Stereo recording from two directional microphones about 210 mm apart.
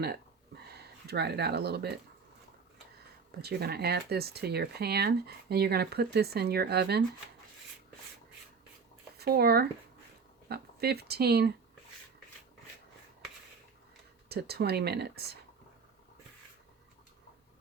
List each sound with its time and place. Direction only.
1.0 s speech: 50° right (ahead or behind)
3.4 s speech: 50° right (ahead or behind)
9.1 s speech: 50° right (ahead or behind)
14.3 s speech: 50° right (ahead or behind)